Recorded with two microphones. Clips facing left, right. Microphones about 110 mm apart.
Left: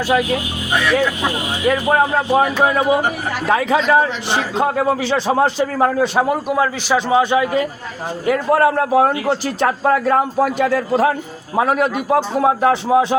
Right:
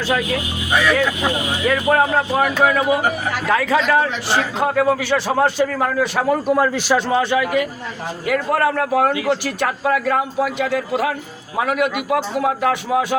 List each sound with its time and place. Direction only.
1.6 s a man's voice: 25° left (ahead or behind)
6.2 s a man's voice: 10° left (ahead or behind)
7.1 s speech: 15° left (ahead or behind)
8.3 s a man's voice: 30° left (ahead or behind)